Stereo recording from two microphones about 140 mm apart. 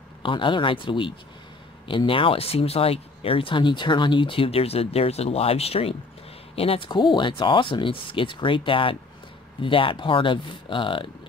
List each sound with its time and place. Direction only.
0.2 s speech: 35° left (ahead or behind)